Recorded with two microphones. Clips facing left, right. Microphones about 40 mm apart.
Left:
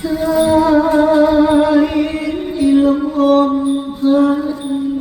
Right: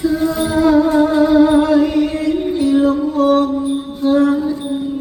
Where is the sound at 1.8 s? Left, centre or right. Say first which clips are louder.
Even; left.